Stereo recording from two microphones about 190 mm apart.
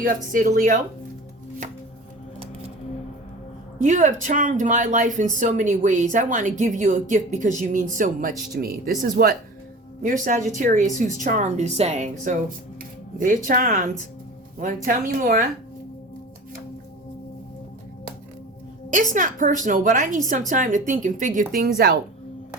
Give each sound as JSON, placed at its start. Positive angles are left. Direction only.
{"t": 0.0, "sound": "speech", "side_deg": -45}
{"t": 3.8, "sound": "speech", "side_deg": -40}
{"t": 18.9, "sound": "speech", "side_deg": -40}
{"t": 20.1, "sound": "a woman's voice", "side_deg": 20}
{"t": 20.5, "sound": "speech", "side_deg": -40}